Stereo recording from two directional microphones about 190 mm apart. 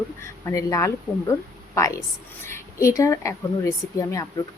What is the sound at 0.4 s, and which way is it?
Speech, 15° left (ahead or behind).